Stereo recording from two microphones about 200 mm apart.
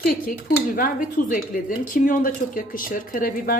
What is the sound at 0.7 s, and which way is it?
A woman's voice, 45° left (ahead or behind).